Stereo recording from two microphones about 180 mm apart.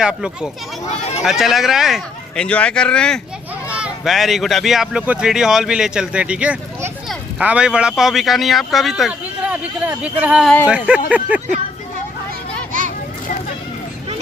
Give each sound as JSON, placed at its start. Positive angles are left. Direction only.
{"t": 0.0, "sound": "speech", "side_deg": -5}
{"t": 0.9, "sound": "run", "side_deg": 35}
{"t": 1.2, "sound": "speech", "side_deg": 0}
{"t": 3.7, "sound": "speech", "side_deg": -5}